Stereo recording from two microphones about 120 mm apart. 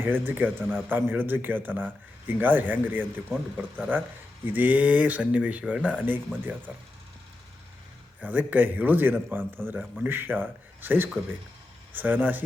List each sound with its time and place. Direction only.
0.0 s speech: 15° right (ahead or behind)
8.2 s speech: 15° right (ahead or behind)